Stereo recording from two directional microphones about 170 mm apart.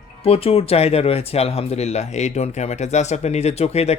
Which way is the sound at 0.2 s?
35° left (ahead or behind).